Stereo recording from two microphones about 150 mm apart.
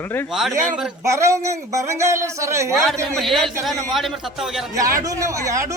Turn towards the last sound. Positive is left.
turn(degrees=-20)  # may be behind; listen again after turning